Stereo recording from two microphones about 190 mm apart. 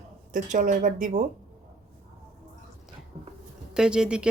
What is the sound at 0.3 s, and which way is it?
Speech, 40° right (ahead or behind).